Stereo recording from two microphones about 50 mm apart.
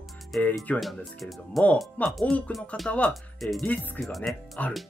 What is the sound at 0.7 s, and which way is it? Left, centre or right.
Speech, left.